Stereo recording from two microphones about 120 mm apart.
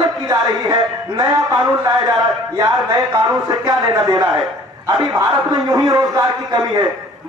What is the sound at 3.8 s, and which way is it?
Speech, 30° right (ahead or behind).